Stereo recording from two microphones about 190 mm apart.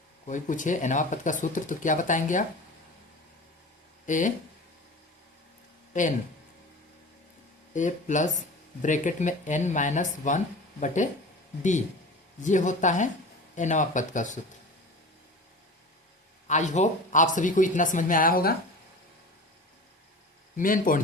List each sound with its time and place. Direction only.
0.3 s speech: 40° left (ahead or behind)
4.0 s speech: 40° left (ahead or behind)
5.9 s speech: 40° left (ahead or behind)
7.7 s speech: 40° left (ahead or behind)
12.4 s speech: 40° left (ahead or behind)
16.5 s speech: 40° left (ahead or behind)
20.6 s speech: 45° left (ahead or behind)